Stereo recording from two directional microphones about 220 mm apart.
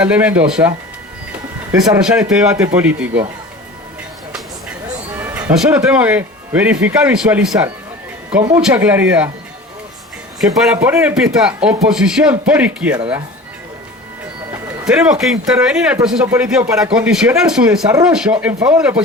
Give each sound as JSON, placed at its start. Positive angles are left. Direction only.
{"t": 0.0, "sound": "speech", "side_deg": -5}
{"t": 1.7, "sound": "speech", "side_deg": -15}
{"t": 2.0, "sound": "speech", "side_deg": -5}
{"t": 5.1, "sound": "speech", "side_deg": -10}
{"t": 10.6, "sound": "speech", "side_deg": -5}
{"t": 14.8, "sound": "speech", "side_deg": -5}